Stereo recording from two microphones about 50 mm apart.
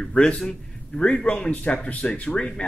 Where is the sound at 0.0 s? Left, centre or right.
Centre.